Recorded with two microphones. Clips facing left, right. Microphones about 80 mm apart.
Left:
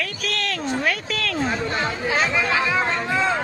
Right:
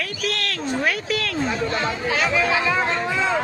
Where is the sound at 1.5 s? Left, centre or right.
Left.